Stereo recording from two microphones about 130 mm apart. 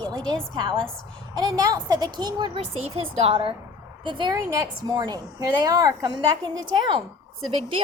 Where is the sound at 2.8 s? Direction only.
50° right (ahead or behind); by 6.8 s 35° right (ahead or behind).